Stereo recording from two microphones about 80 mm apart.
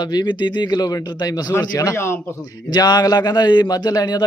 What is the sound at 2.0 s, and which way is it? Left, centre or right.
Speech, left.